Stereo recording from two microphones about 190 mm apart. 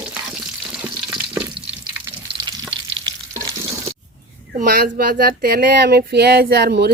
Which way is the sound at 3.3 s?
15° right (ahead or behind).